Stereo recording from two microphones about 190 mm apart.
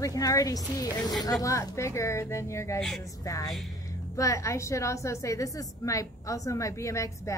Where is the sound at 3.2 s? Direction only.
15° left (ahead or behind).